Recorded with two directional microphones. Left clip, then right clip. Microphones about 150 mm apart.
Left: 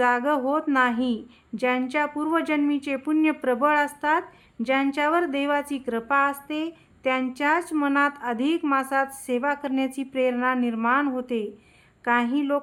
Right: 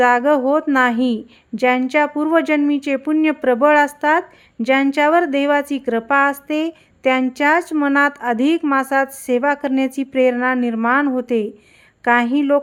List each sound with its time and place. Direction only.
0.0 s a woman's voice: 35° right (ahead or behind)